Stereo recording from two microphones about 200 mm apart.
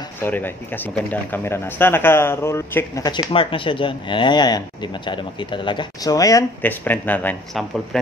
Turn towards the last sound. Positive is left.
turn(degrees=5)  # may be behind; listen again after turning